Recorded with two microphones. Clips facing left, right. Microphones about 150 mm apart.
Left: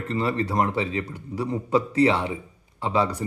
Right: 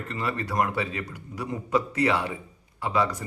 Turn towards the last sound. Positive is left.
turn(degrees=25)  # may be behind; listen again after turning